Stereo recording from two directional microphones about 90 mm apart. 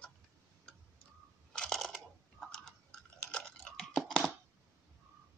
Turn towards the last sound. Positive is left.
turn(degrees=5)  # may be behind; listen again after turning